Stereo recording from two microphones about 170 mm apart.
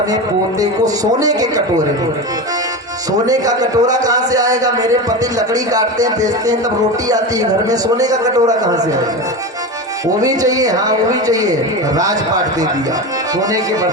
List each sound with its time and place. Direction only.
1.2 s a man's voice: 20° right (ahead or behind)
3.1 s a man's voice: 20° right (ahead or behind)
10.2 s a man's voice: 20° right (ahead or behind)